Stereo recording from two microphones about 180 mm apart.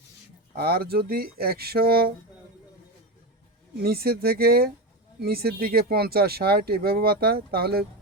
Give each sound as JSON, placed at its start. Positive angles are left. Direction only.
{"t": 0.5, "sound": "speech", "side_deg": -60}
{"t": 3.8, "sound": "speech", "side_deg": -60}